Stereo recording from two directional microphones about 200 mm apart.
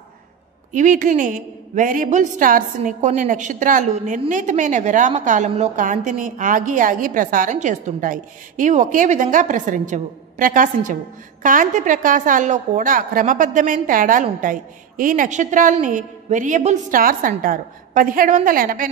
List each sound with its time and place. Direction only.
0.7 s a woman's voice: 40° right (ahead or behind)